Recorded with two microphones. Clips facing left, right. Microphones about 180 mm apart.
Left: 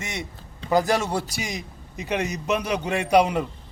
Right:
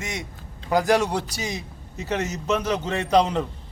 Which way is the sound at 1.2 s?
10° left (ahead or behind).